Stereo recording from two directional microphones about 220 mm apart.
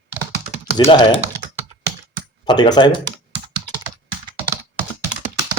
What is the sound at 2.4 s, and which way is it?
Speech, 20° left (ahead or behind).